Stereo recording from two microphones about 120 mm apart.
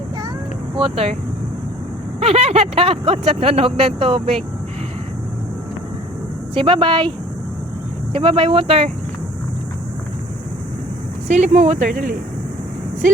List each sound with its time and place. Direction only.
0.8 s speech: 50° right (ahead or behind)
2.2 s speech: 60° right (ahead or behind)
6.5 s speech: 45° right (ahead or behind)
8.1 s speech: 45° right (ahead or behind)
11.3 s speech: 70° right (ahead or behind); by 12.0 s 90° right